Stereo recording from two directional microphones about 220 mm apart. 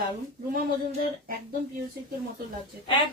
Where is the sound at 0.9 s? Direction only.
40° right (ahead or behind).